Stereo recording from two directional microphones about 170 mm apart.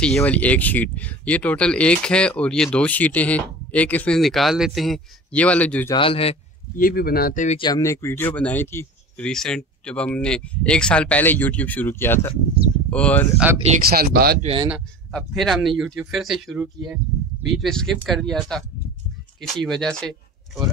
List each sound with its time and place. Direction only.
0.0 s speech: 5° left (ahead or behind)
5.9 s speech: 35° left (ahead or behind)
6.8 s speech: 60° left (ahead or behind)
7.4 s speech: 30° left (ahead or behind); by 13.3 s 10° left (ahead or behind)
13.8 s speech: 65° right (ahead or behind)
14.4 s speech: 30° right (ahead or behind)
15.0 s speech: 5° left (ahead or behind)
19.6 s speech: centre (ahead or behind)